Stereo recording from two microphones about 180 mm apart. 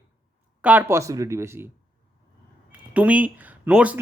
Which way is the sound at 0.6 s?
10° right (ahead or behind).